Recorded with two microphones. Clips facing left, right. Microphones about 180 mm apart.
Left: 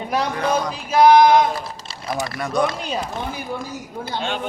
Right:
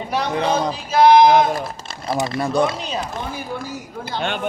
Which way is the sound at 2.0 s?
25° right (ahead or behind).